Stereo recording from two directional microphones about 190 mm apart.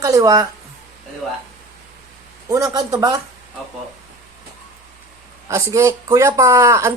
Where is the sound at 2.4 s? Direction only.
15° right (ahead or behind).